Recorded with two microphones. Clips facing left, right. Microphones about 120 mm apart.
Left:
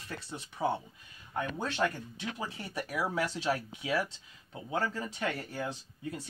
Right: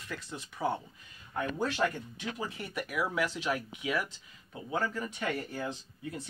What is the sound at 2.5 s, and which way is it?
Speech, 30° left (ahead or behind).